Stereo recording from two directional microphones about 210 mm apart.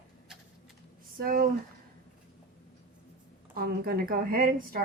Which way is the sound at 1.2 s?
45° right (ahead or behind).